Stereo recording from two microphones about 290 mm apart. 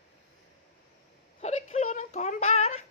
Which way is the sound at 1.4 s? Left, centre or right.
Left.